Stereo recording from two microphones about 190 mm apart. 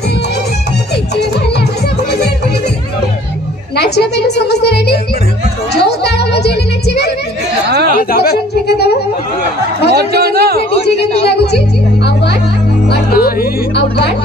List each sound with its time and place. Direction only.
1.1 s music: 60° left (ahead or behind)
3.7 s a woman's voice: 60° left (ahead or behind)
5.7 s music: 60° left (ahead or behind)
7.7 s chatter: 55° right (ahead or behind)
8.0 s a woman's voice: 50° left (ahead or behind)
9.9 s a sound: 55° right (ahead or behind)
11.2 s speech: 60° left (ahead or behind)